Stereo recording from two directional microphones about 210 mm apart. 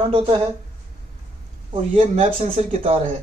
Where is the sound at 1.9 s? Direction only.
35° right (ahead or behind).